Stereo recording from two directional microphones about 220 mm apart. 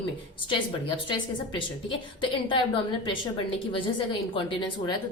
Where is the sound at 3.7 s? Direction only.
25° left (ahead or behind).